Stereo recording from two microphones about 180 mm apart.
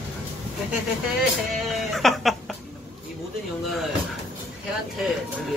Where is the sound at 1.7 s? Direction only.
Centre (ahead or behind).